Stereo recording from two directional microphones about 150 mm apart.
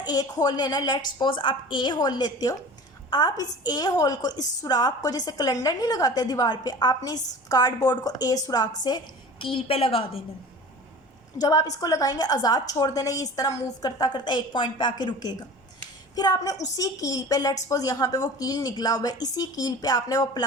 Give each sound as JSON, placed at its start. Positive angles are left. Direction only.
{"t": 0.0, "sound": "a woman's voice", "side_deg": 25}
{"t": 9.4, "sound": "a woman's voice", "side_deg": 40}
{"t": 11.3, "sound": "a woman's voice", "side_deg": 25}